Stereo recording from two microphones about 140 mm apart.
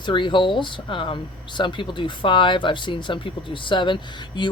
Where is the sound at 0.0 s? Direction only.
35° left (ahead or behind).